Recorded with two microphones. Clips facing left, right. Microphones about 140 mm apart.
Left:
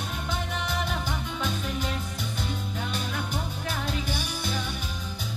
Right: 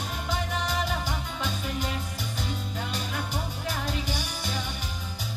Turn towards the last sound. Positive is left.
turn(degrees=-10)  # may be behind; listen again after turning